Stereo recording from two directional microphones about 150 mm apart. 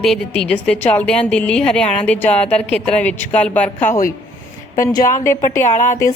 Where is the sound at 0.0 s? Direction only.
5° left (ahead or behind).